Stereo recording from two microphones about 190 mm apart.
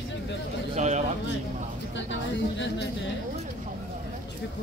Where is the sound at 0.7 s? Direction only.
35° right (ahead or behind).